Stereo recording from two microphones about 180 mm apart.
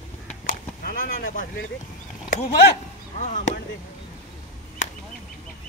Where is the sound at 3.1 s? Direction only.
40° left (ahead or behind).